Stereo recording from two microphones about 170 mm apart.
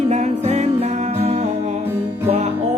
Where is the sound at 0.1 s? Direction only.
40° right (ahead or behind).